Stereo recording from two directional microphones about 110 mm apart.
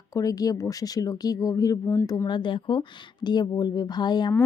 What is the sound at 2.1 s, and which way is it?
A woman's voice, 40° left (ahead or behind).